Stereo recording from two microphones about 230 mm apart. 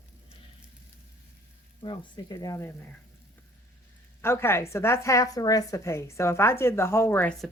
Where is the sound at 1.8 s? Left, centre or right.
Centre.